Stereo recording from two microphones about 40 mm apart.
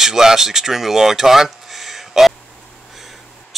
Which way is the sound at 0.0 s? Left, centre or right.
Centre.